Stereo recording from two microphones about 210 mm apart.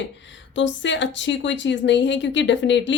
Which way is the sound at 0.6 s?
60° left (ahead or behind).